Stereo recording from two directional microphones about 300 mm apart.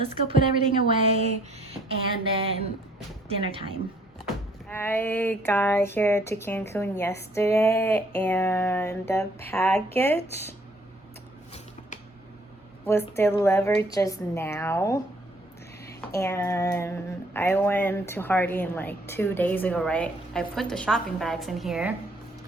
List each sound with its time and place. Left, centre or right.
0.0 s a woman's voice: centre
2.3 s a woman's voice: centre
4.7 s speech: centre
12.8 s speech: centre